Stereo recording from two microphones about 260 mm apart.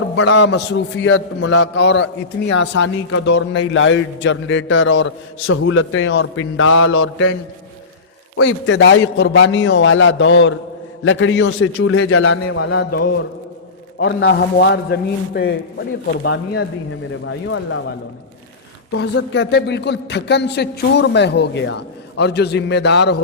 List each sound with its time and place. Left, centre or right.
0.2 s a man's voice: left
8.4 s a man's voice: left
14.2 s a man's voice: left
18.9 s speech: left